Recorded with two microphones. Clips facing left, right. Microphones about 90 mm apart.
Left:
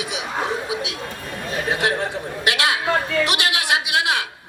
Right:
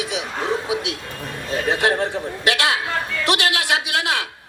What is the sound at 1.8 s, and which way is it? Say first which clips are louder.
A man's voice: right 2 dB; 20° left (ahead or behind).